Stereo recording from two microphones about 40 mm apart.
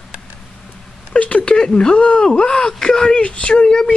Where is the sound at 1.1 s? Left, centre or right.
Left.